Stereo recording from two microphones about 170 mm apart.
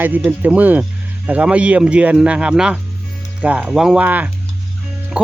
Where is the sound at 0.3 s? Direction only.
10° right (ahead or behind).